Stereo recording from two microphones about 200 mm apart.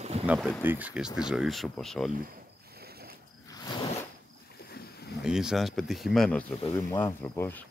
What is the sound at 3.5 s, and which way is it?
Zipper, 20° left (ahead or behind).